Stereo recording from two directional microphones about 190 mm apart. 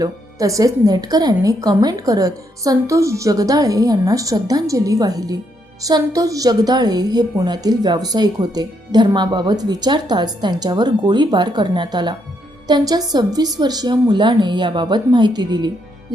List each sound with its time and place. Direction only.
0.0 s a woman's voice: 15° right (ahead or behind)